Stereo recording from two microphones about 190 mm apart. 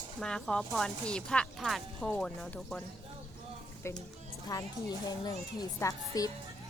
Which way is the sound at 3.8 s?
15° left (ahead or behind).